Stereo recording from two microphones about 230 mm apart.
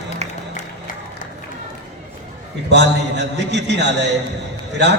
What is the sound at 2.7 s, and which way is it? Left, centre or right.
A man's voice, right.